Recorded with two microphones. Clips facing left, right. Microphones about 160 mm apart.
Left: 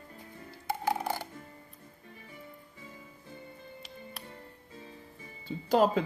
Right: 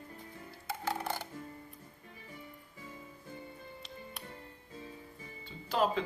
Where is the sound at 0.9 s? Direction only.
10° left (ahead or behind).